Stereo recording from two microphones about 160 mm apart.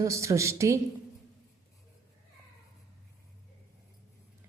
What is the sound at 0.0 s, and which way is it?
Speech, 20° right (ahead or behind).